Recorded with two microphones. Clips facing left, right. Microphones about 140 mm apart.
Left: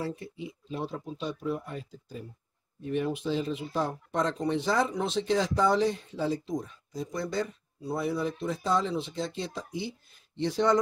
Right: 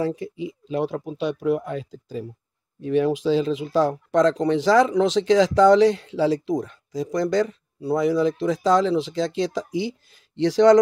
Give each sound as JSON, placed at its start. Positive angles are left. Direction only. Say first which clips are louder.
{"t": 0.0, "sound": "speech", "louder": "right 9 dB", "side_deg": -90}